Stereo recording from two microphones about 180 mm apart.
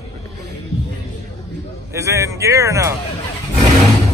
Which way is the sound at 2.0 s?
15° right (ahead or behind).